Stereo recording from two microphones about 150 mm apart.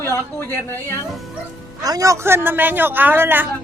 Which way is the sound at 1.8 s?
25° right (ahead or behind).